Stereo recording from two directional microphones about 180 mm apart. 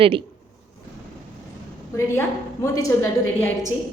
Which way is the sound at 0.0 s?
30° right (ahead or behind).